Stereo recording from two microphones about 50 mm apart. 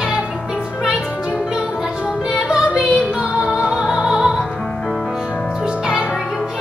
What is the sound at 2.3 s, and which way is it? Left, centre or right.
Music, centre.